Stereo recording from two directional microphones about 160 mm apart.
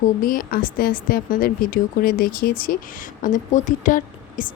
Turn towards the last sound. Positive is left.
turn(degrees=55)  # may be behind; listen again after turning